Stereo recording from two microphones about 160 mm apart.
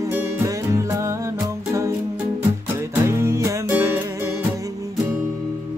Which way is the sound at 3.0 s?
15° right (ahead or behind).